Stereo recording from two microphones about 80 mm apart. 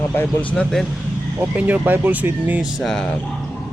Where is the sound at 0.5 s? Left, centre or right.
Centre.